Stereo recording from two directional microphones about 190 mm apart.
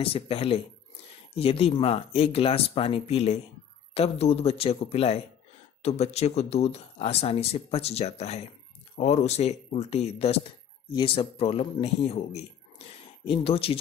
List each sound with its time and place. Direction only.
0.0 s speech: 30° left (ahead or behind)